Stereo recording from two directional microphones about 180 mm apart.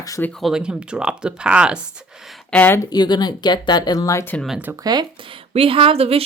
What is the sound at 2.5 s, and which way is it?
Speech, 10° left (ahead or behind).